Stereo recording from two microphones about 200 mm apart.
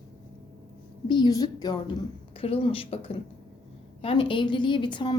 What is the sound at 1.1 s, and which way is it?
A woman's voice, 20° left (ahead or behind).